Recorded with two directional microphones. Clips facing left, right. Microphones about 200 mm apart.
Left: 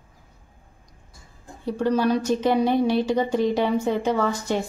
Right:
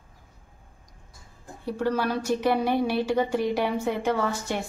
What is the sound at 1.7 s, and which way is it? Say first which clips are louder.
Speech: left 5 dB; 15° left (ahead or behind).